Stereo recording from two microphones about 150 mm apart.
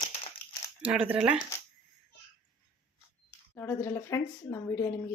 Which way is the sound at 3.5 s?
15° left (ahead or behind).